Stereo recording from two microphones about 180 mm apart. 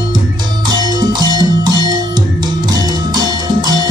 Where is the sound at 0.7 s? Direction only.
20° right (ahead or behind).